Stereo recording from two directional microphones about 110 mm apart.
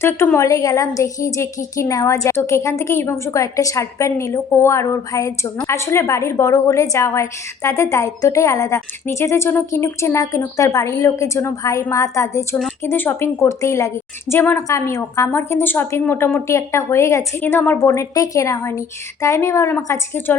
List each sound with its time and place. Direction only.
0.0 s a woman's voice: 25° left (ahead or behind)